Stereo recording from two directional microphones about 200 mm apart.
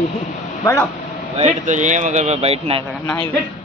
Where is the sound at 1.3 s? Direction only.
35° right (ahead or behind).